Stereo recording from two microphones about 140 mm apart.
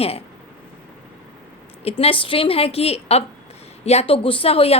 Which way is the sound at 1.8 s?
40° left (ahead or behind).